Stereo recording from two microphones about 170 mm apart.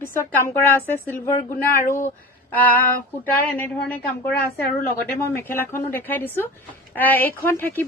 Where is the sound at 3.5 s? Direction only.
10° left (ahead or behind).